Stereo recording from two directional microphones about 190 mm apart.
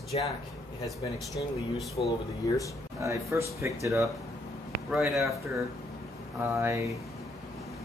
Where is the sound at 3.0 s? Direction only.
15° right (ahead or behind).